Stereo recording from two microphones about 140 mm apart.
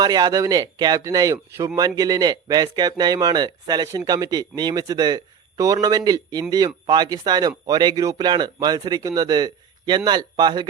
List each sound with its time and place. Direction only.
0.0 s speech: 30° right (ahead or behind)